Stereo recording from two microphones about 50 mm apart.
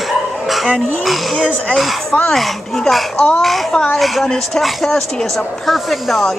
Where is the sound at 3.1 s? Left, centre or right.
Centre.